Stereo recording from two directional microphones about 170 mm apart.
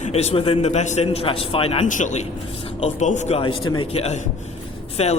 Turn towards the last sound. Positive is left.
turn(degrees=40)  # may be behind; listen again after turning